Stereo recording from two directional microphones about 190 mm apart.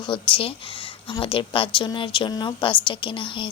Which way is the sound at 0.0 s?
25° left (ahead or behind).